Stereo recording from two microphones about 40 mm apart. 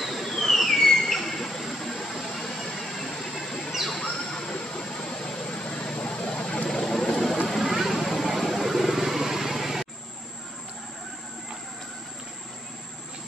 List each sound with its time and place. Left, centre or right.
0.0 s a sound: centre
3.7 s bird: centre
4.3 s vehicle: centre
6.7 s vehicle: centre